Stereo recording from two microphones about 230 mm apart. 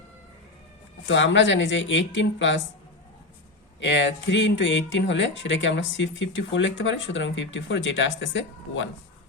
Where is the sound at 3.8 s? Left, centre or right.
Left.